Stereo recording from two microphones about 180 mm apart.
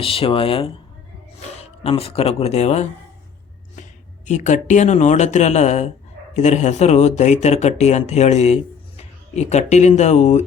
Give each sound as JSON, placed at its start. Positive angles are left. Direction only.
{"t": 0.0, "sound": "speech", "side_deg": 30}
{"t": 4.3, "sound": "speech", "side_deg": 40}